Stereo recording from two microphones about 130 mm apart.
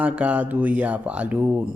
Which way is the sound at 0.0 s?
10° right (ahead or behind).